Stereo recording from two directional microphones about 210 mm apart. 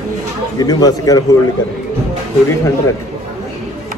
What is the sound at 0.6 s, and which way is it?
Speech, 20° left (ahead or behind).